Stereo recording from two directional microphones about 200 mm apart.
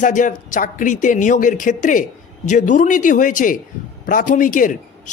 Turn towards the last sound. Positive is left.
turn(degrees=40)  # may be behind; listen again after turning